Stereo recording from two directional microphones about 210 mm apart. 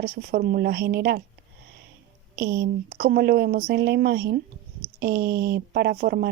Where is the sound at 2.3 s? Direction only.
50° right (ahead or behind).